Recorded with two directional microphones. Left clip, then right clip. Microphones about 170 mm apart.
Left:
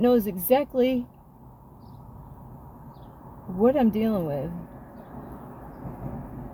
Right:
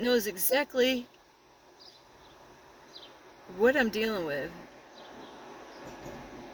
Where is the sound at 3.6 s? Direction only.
65° left (ahead or behind).